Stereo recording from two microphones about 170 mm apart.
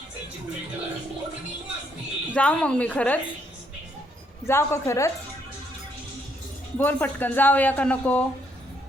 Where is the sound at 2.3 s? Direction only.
5° left (ahead or behind).